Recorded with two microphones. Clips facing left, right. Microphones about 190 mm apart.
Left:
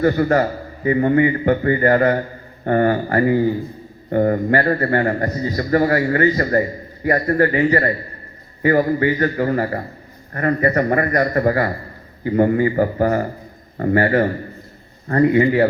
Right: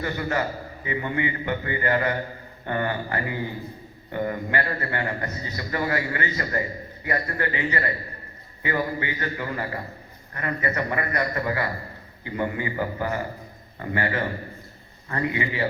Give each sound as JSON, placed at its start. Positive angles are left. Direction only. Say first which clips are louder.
{"t": 0.0, "sound": "a man's voice", "louder": "left 11 dB", "side_deg": 45}